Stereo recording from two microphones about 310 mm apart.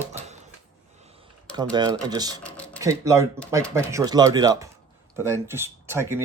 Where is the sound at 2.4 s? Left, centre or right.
Centre.